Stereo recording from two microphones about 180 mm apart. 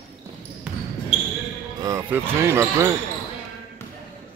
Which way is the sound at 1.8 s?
15° right (ahead or behind).